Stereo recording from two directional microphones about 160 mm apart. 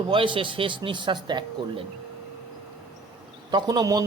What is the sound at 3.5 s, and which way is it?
Speech, 25° right (ahead or behind).